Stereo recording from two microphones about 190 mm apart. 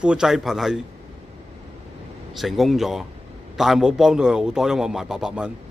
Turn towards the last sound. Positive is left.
turn(degrees=-5)  # may be behind; listen again after turning